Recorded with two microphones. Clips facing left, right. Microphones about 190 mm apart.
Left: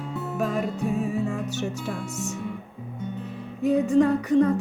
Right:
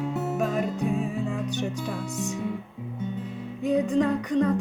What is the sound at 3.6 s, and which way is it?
Music, 5° left (ahead or behind).